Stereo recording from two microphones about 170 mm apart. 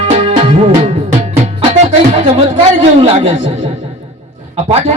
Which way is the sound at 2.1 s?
35° right (ahead or behind).